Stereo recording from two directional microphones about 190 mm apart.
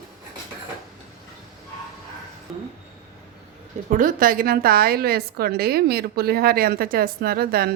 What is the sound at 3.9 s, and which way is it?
A woman's voice, 45° right (ahead or behind).